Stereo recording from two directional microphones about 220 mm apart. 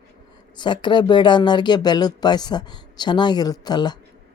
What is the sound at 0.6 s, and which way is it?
Speech, 20° left (ahead or behind).